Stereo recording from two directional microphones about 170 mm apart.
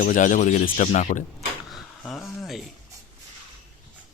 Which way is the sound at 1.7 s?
Centre (ahead or behind).